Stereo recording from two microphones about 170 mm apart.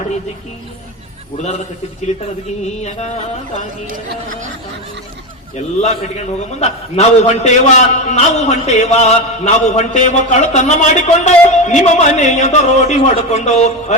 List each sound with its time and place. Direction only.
1.4 s a man's voice: 45° left (ahead or behind)
5.5 s a man's voice: 40° left (ahead or behind)